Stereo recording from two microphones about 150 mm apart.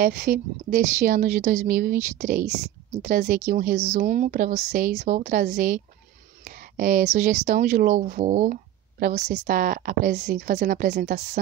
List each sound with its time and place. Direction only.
0.0 s a woman's voice: 80° right
0.7 s speech: 55° right (ahead or behind)
3.4 s speech: 75° right (ahead or behind); by 7.7 s 55° right (ahead or behind)
7.7 s a woman's voice: 75° right (ahead or behind)
8.0 s a woman's voice: 55° right (ahead or behind)